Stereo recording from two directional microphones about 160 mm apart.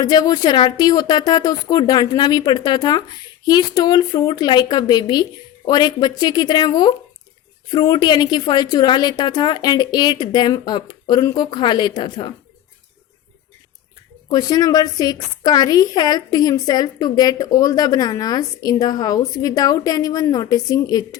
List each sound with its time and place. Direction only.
0.0 s a woman's voice: 25° left (ahead or behind)
14.3 s a woman's voice: 25° left (ahead or behind)